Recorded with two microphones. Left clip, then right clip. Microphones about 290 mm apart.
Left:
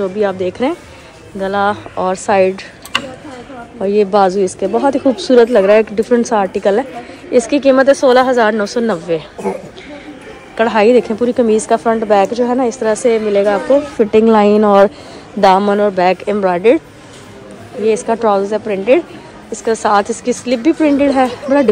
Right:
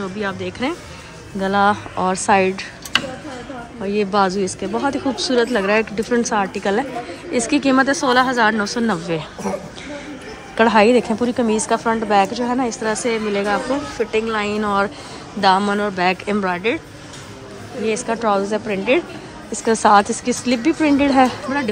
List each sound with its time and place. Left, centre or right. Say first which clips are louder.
0.0 s a woman's voice: left 9 dB; centre
3.8 s a woman's voice: left 7 dB; centre
10.5 s a woman's voice: left 3 dB; centre
17.8 s a woman's voice: left 7 dB; centre